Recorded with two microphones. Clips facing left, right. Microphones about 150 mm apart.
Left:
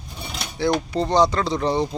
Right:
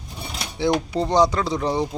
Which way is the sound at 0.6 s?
15° right (ahead or behind).